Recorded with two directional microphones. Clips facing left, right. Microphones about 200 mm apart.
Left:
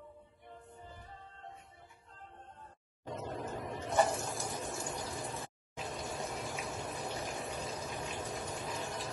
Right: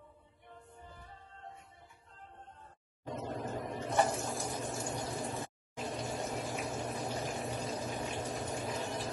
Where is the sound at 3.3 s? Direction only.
45° right (ahead or behind).